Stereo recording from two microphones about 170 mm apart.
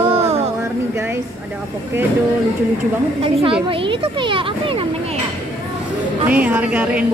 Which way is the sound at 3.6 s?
30° right (ahead or behind).